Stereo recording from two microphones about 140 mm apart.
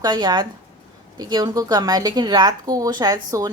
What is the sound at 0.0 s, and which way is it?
A woman's voice, 30° right (ahead or behind).